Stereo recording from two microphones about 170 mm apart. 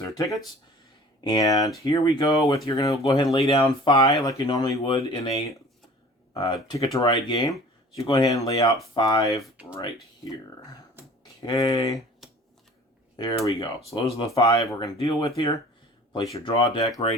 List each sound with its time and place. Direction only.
0.0 s speech: 20° left (ahead or behind)
3.3 s speech: 35° left (ahead or behind)
9.4 s speech: 5° right (ahead or behind)
9.7 s speech: 25° left (ahead or behind)
11.4 s speech: 20° left (ahead or behind)
13.1 s speech: 25° left (ahead or behind)
16.3 s speech: 30° left (ahead or behind)